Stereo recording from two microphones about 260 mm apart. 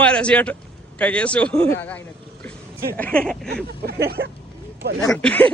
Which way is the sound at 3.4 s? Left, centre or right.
Right.